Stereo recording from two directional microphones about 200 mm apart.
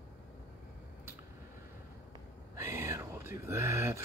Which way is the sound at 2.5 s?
15° right (ahead or behind).